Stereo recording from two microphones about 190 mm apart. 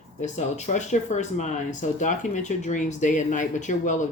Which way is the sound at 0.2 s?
40° left (ahead or behind).